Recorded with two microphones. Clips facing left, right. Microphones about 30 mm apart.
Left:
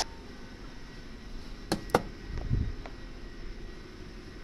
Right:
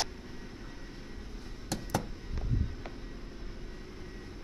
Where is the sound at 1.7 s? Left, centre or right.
Left.